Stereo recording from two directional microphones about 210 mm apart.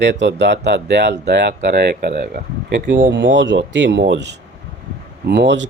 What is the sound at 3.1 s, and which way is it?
Speech, 60° right (ahead or behind).